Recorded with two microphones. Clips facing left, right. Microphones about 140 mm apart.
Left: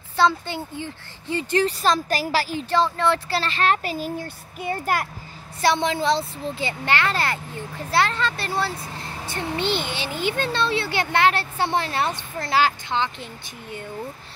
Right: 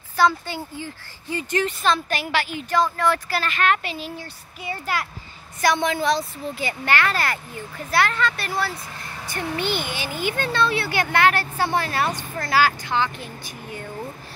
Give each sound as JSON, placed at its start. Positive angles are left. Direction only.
{"t": 0.1, "sound": "a woman's voice", "side_deg": 25}
{"t": 5.6, "sound": "a child's voice", "side_deg": 25}